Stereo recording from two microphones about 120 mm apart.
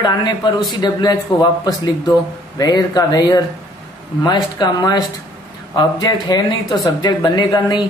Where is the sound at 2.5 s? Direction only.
35° left (ahead or behind).